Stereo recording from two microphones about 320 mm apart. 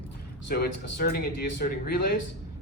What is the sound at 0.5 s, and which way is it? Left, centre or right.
A man's voice, left.